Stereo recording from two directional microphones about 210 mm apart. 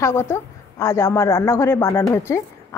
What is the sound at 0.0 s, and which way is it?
A woman's voice, 10° left (ahead or behind).